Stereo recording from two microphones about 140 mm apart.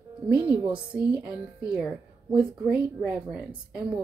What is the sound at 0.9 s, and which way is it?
A woman's voice, 5° right (ahead or behind).